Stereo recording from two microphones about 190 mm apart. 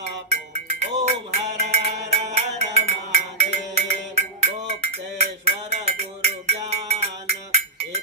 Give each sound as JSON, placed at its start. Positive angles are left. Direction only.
{"t": 0.0, "sound": "music", "side_deg": -35}